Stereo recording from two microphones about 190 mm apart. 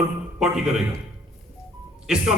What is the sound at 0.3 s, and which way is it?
Speech, 5° right (ahead or behind).